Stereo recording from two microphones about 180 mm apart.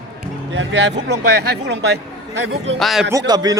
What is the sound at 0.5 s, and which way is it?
Speech, 75° right (ahead or behind).